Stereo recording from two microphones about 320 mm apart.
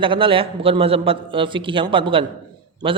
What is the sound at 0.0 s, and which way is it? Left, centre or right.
A man's voice, centre.